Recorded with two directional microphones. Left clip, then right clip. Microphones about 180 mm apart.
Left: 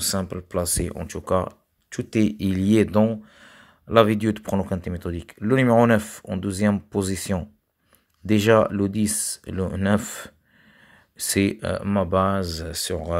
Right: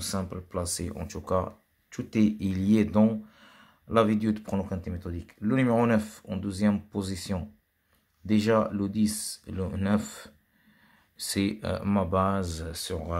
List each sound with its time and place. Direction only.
0.0 s speech: 35° left (ahead or behind)